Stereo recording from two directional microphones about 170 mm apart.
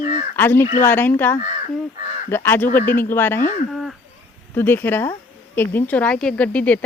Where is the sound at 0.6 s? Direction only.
50° left (ahead or behind).